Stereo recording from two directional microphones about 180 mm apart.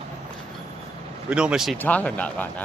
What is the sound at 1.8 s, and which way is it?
Speech, 10° left (ahead or behind).